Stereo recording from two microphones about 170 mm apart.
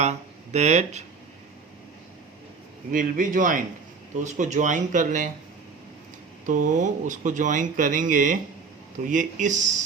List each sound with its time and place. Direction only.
0.0 s speech: 40° right (ahead or behind)
2.9 s speech: 50° right (ahead or behind)
6.4 s speech: 50° right (ahead or behind)